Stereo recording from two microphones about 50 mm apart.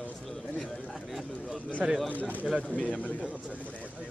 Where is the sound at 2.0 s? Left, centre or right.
Left.